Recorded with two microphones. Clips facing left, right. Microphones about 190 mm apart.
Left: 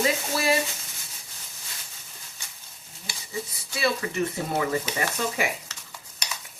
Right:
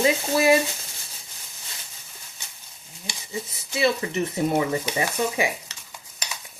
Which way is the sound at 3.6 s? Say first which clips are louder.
Right 4 dB; 20° right (ahead or behind).